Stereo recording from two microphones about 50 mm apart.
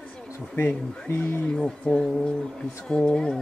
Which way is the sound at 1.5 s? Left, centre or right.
Centre.